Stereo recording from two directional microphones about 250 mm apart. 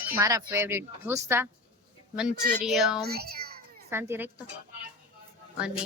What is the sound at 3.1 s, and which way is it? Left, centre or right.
Child singing, right.